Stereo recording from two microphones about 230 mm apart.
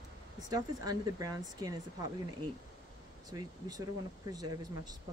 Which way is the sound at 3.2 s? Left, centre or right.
Centre.